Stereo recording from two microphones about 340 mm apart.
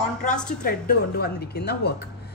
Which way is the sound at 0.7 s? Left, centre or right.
Left.